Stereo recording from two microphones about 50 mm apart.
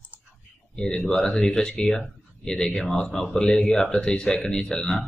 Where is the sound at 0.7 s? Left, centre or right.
Centre.